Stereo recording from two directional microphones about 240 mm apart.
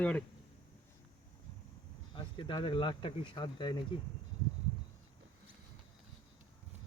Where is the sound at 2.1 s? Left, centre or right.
Left.